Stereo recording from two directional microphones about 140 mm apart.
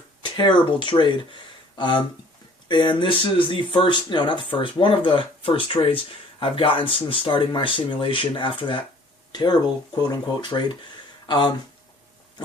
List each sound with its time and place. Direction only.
0.2 s speech: 35° left (ahead or behind)